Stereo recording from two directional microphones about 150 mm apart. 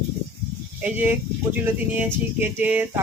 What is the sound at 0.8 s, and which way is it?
Speech, 10° right (ahead or behind).